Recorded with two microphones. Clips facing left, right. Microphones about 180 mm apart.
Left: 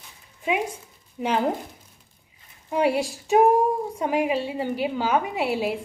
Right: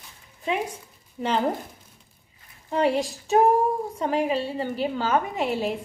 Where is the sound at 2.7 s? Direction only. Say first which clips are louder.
Even; 10° left (ahead or behind).